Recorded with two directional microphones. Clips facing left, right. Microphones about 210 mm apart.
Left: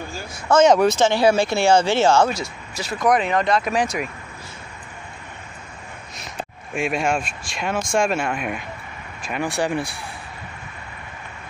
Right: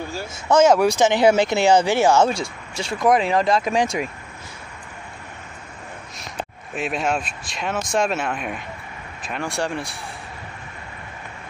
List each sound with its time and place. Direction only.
0.5 s speech: 10° right (ahead or behind)
2.2 s speech: 30° right (ahead or behind)
6.7 s speech: 10° left (ahead or behind)